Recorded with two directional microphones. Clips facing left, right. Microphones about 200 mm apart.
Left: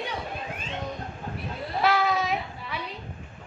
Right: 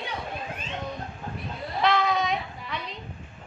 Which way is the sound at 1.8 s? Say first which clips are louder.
Even; 5° left (ahead or behind).